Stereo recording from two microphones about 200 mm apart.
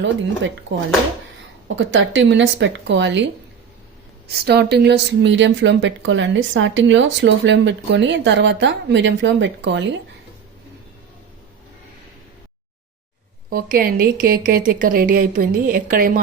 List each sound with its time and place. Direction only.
0.0 s a woman's voice: 65° right (ahead or behind)
4.3 s a woman's voice: 55° right (ahead or behind)
13.5 s a woman's voice: 45° right (ahead or behind)